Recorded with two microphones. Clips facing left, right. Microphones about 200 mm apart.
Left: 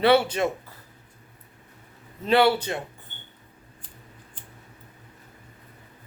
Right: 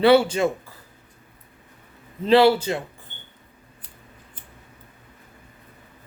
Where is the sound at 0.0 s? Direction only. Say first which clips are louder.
Right 4 dB; 25° right (ahead or behind).